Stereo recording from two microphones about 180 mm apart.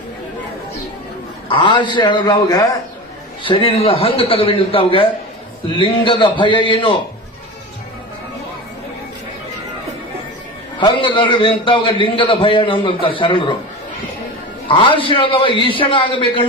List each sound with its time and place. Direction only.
1.5 s a man's voice: 25° left (ahead or behind)
10.8 s a man's voice: 25° left (ahead or behind)
14.7 s a man's voice: 30° left (ahead or behind)